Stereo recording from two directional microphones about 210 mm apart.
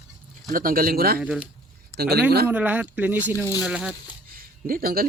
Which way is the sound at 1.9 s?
50° right (ahead or behind).